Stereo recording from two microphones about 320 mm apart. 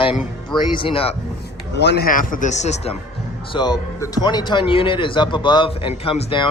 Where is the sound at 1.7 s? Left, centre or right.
Left.